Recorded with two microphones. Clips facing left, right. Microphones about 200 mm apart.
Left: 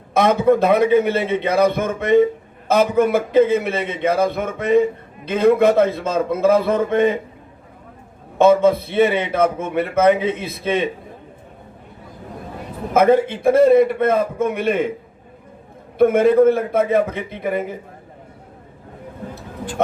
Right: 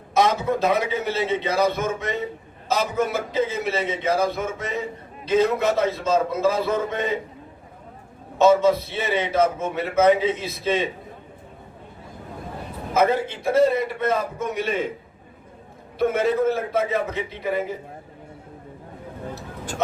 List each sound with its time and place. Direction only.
0.1 s a man's voice: 55° left (ahead or behind)
8.4 s a man's voice: 55° left (ahead or behind)
12.9 s a man's voice: 55° left (ahead or behind)
16.0 s a man's voice: 55° left (ahead or behind)